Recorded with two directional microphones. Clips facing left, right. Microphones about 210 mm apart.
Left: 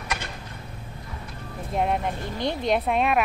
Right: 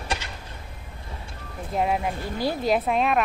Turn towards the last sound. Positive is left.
turn(degrees=0)  # may be behind; listen again after turning